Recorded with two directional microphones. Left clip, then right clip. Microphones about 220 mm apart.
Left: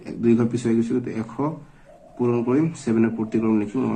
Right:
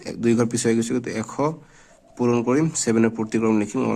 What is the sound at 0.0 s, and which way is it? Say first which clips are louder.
Speech: even; 40° right (ahead or behind).